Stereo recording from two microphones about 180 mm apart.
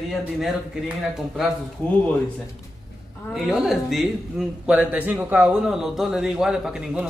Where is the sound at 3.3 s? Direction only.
Centre (ahead or behind).